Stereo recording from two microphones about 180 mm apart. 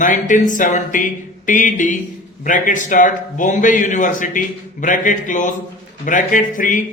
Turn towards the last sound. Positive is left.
turn(degrees=45)  # may be behind; listen again after turning